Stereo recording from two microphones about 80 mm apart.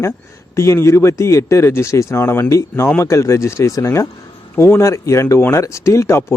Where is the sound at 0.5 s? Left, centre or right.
Left.